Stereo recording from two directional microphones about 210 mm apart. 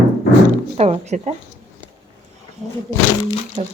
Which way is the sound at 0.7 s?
30° right (ahead or behind).